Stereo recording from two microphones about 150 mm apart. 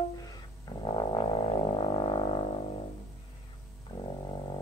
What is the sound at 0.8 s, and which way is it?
Music, 30° left (ahead or behind).